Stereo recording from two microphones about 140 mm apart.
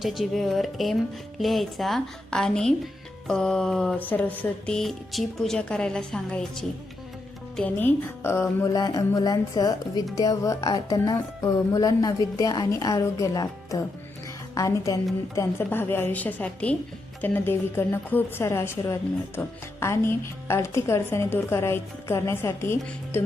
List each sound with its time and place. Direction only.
0.0 s a woman's voice: centre (ahead or behind); by 23.2 s 15° left (ahead or behind)